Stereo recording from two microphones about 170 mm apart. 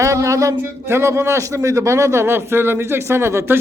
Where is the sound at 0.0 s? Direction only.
20° right (ahead or behind).